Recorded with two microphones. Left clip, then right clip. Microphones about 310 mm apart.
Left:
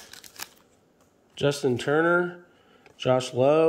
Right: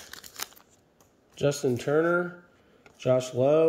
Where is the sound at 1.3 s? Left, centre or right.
Centre.